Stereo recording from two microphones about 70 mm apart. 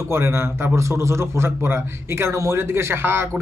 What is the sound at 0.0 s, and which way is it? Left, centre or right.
A man's voice, right.